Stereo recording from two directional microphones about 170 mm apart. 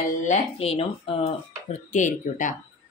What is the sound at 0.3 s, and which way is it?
Speech, 35° left (ahead or behind).